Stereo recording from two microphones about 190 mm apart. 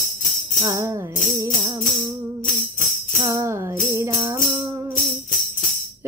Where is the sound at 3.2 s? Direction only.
15° right (ahead or behind).